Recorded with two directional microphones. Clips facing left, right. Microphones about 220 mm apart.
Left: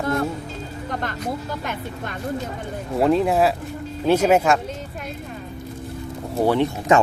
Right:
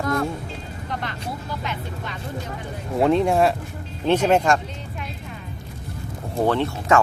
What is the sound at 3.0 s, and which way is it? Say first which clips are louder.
Speech: even; centre (ahead or behind).